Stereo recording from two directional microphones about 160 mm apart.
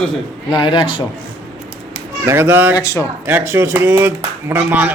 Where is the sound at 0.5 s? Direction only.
30° left (ahead or behind).